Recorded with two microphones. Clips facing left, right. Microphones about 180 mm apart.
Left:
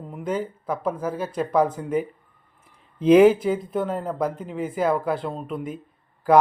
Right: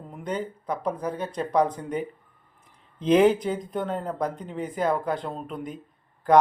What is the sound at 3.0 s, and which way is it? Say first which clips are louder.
Speech: left 5 dB; 10° left (ahead or behind).